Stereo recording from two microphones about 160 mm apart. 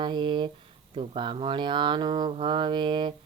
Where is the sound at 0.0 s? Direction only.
30° right (ahead or behind).